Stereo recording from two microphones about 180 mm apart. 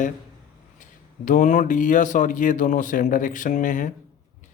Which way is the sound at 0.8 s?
45° left (ahead or behind).